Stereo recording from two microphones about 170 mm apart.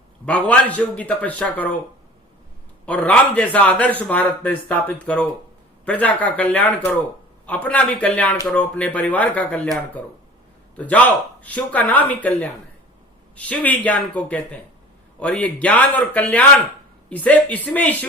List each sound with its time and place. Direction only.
0.3 s a man's voice: 10° left (ahead or behind)
2.8 s a man's voice: 10° left (ahead or behind)